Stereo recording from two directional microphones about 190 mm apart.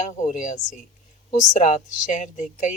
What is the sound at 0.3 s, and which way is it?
Speech, 40° left (ahead or behind).